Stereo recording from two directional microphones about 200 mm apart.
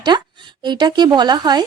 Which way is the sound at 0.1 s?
20° right (ahead or behind).